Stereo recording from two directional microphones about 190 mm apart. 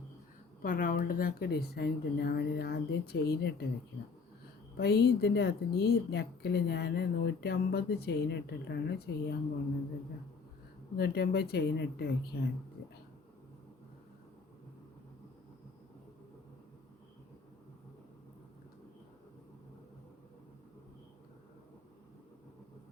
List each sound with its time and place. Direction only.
0.6 s a woman's voice: 45° left (ahead or behind)
4.8 s a woman's voice: 60° left (ahead or behind)
10.9 s a woman's voice: 60° left (ahead or behind)